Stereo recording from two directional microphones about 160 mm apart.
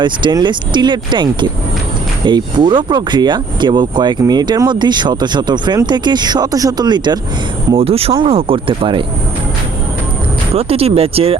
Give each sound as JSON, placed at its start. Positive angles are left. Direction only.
{"t": 0.0, "sound": "speech", "side_deg": -30}
{"t": 7.8, "sound": "speech", "side_deg": -35}
{"t": 10.5, "sound": "speech", "side_deg": -40}